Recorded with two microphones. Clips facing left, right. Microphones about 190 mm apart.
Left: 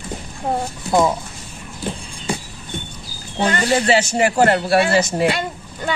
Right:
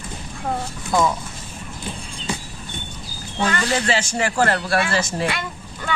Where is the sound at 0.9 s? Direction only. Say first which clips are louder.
Left 3 dB; 25° left (ahead or behind).